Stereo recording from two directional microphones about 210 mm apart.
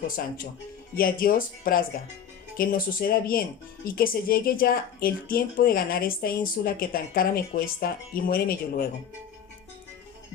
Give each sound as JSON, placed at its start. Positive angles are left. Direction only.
{"t": 0.2, "sound": "speech", "side_deg": 50}